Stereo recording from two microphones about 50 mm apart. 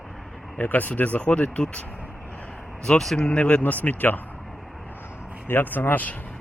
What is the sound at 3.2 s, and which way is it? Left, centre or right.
Speech, left.